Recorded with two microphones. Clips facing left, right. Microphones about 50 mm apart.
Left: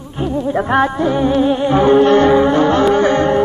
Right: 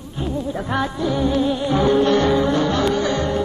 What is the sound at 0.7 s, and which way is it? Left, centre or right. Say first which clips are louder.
Music: left 6 dB; left.